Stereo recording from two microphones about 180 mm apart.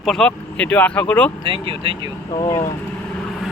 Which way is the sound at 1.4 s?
30° right (ahead or behind).